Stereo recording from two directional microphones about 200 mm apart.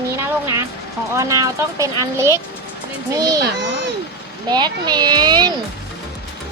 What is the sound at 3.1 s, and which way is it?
Speech, 15° right (ahead or behind).